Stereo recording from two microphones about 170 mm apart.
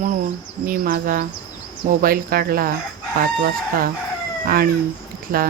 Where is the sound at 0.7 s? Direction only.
55° right (ahead or behind).